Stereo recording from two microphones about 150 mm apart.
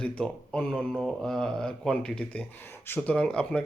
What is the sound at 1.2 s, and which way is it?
Speech, 5° left (ahead or behind).